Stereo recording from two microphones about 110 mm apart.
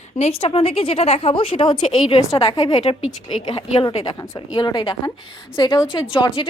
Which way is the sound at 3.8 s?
40° left (ahead or behind).